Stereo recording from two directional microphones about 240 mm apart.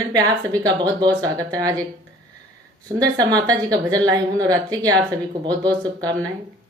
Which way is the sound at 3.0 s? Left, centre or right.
Centre.